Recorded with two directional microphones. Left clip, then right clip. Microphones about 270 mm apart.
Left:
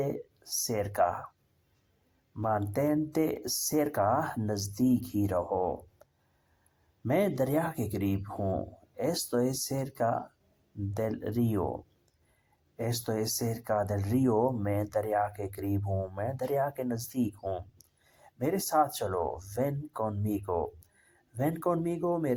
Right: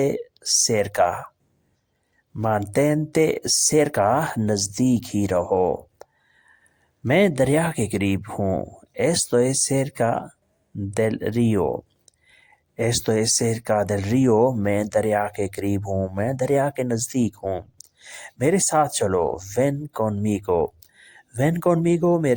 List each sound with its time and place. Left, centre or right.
0.0 s speech: right
2.3 s speech: right